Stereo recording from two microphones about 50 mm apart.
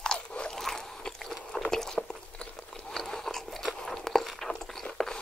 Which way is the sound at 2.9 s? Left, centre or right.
Centre.